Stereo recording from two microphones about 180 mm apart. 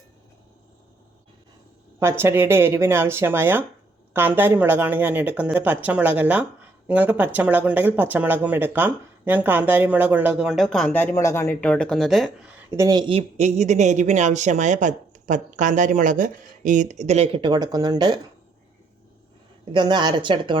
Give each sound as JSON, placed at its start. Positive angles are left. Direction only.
{"t": 2.0, "sound": "speech", "side_deg": -15}
{"t": 11.4, "sound": "speech", "side_deg": 5}
{"t": 19.7, "sound": "speech", "side_deg": -25}